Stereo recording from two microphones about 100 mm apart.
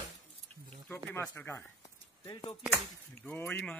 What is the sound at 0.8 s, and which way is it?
Speech, 20° left (ahead or behind).